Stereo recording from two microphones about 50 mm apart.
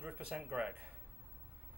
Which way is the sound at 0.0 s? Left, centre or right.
Right.